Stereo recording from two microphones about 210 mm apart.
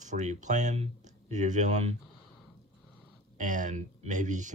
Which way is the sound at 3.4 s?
35° right (ahead or behind).